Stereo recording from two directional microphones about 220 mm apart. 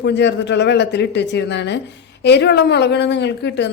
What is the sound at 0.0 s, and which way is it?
A man's voice, 50° left (ahead or behind).